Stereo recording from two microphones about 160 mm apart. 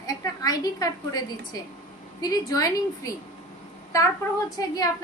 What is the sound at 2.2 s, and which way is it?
Speech, 25° left (ahead or behind).